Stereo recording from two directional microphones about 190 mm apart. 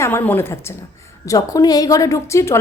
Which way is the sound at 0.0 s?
10° left (ahead or behind).